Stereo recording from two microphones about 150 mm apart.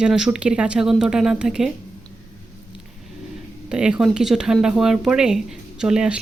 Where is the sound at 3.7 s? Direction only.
5° right (ahead or behind).